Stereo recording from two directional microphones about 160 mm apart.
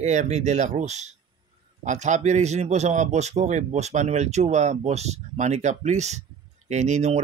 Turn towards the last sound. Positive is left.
turn(degrees=-45)  # may be behind; listen again after turning